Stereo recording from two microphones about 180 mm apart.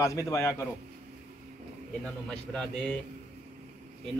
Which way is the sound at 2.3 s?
5° left (ahead or behind).